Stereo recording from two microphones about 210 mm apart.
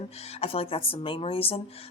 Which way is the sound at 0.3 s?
30° left (ahead or behind).